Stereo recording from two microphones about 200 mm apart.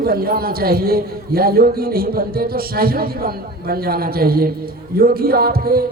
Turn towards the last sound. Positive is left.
turn(degrees=-50)  # may be behind; listen again after turning